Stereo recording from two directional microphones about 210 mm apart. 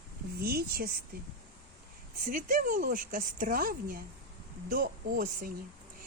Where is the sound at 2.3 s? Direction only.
40° right (ahead or behind).